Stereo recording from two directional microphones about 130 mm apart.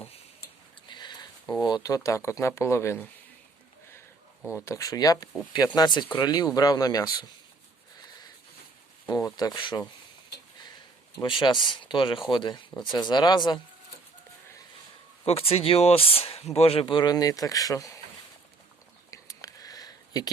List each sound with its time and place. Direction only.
0.9 s a sound: 35° left (ahead or behind)
1.6 s speech: 30° left (ahead or behind)
4.6 s speech: 25° left (ahead or behind)
9.0 s speech: 30° left (ahead or behind)
11.2 s speech: 40° left (ahead or behind)
15.2 s speech: 50° left (ahead or behind); by 18.0 s 25° left (ahead or behind)
19.1 s a sound: 25° left (ahead or behind)